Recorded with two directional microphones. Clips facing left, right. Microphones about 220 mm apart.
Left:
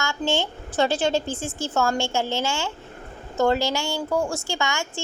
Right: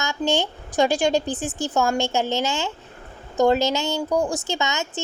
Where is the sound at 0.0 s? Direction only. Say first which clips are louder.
Right 2 dB; 15° right (ahead or behind).